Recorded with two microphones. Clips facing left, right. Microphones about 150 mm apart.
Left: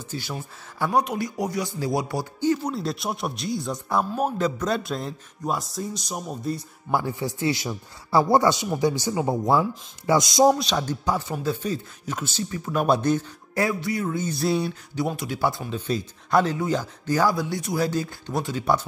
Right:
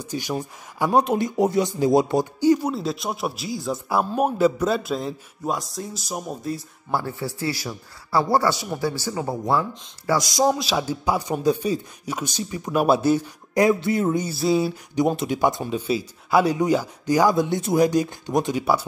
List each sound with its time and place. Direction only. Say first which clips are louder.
0.0 s speech: right 5 dB; 15° right (ahead or behind)
0.9 s speech: right 5 dB; 25° right (ahead or behind)
2.4 s speech: right 4 dB; 10° right (ahead or behind)
2.7 s a man's voice: right 2 dB; centre (ahead or behind)
6.9 s speech: left 1 dB; 15° left (ahead or behind)
10.4 s speech: left 2 dB; 5° right (ahead or behind); by 14.1 s 25° right (ahead or behind)
14.3 s a man's voice: right 1 dB; centre (ahead or behind)
15.0 s speech: right 5 dB; 20° right (ahead or behind)
15.7 s speech: right 3 dB; 5° right (ahead or behind)